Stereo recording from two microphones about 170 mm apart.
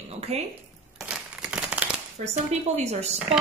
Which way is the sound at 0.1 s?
40° right (ahead or behind).